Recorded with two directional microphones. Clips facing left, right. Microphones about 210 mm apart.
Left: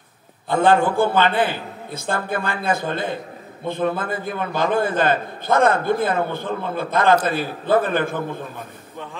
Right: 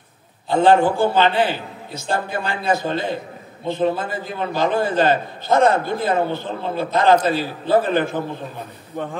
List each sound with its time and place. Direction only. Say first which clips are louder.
0.5 s a man's voice: right 2 dB; 55° left (ahead or behind)